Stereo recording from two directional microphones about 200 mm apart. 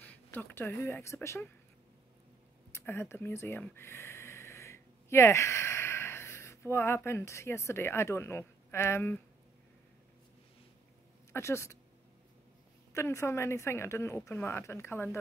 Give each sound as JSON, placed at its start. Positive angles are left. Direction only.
{"t": 0.0, "sound": "speech", "side_deg": 10}
{"t": 2.7, "sound": "speech", "side_deg": 10}
{"t": 11.3, "sound": "speech", "side_deg": 15}
{"t": 12.9, "sound": "speech", "side_deg": 15}